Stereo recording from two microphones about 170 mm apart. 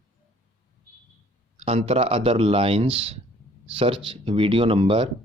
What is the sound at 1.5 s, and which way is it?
Speech, 35° right (ahead or behind).